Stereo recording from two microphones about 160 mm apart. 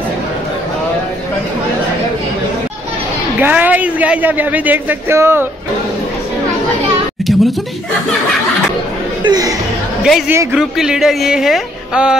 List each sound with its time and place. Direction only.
3.3 s a man's voice: 10° right (ahead or behind)
9.2 s speech: 25° right (ahead or behind)
10.0 s speech: centre (ahead or behind)